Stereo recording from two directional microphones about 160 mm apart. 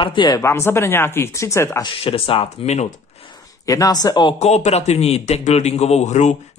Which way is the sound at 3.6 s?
20° left (ahead or behind).